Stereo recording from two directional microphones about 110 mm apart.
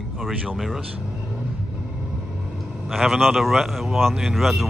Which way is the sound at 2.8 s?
Centre (ahead or behind).